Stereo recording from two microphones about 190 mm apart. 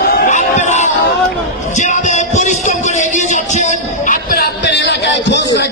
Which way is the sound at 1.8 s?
40° left (ahead or behind).